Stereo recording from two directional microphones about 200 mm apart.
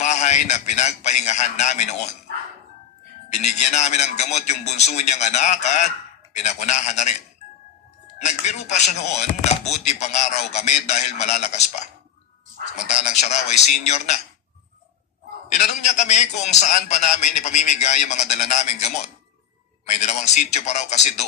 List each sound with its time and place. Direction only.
0.0 s a man's voice: 35° left (ahead or behind)
3.3 s a man's voice: 35° left (ahead or behind)
8.2 s a man's voice: 35° left (ahead or behind)
12.9 s a man's voice: 35° left (ahead or behind)
15.4 s a man's voice: 35° left (ahead or behind)